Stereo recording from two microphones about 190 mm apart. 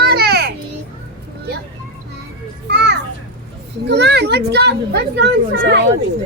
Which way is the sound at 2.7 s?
60° right (ahead or behind).